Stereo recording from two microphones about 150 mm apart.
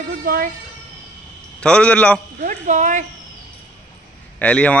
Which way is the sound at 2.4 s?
60° right (ahead or behind).